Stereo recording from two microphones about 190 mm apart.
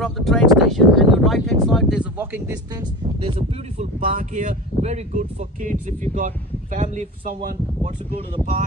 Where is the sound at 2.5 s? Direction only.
20° right (ahead or behind).